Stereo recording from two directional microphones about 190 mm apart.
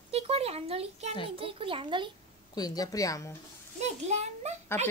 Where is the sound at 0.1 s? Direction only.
30° right (ahead or behind).